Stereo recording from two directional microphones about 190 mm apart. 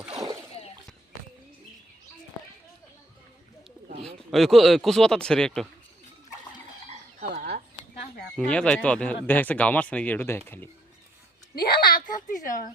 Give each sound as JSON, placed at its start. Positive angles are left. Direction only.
{"t": 4.0, "sound": "speech", "side_deg": 0}
{"t": 7.2, "sound": "chicken", "side_deg": -55}
{"t": 8.4, "sound": "speech", "side_deg": 5}
{"t": 11.5, "sound": "a sound", "side_deg": 55}